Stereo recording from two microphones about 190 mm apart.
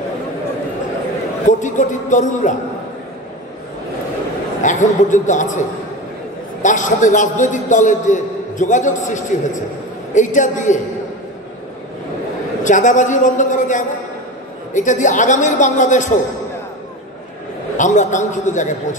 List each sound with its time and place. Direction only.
1.5 s a man's voice: 40° left (ahead or behind)
4.6 s a man's voice: 40° left (ahead or behind)
12.6 s a man's voice: 40° left (ahead or behind)
17.7 s a man's voice: 40° left (ahead or behind)